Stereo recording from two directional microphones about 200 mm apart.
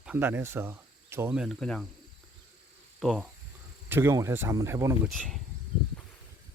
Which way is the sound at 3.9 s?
10° right (ahead or behind).